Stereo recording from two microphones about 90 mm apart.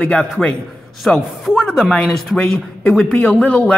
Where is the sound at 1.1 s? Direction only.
15° left (ahead or behind).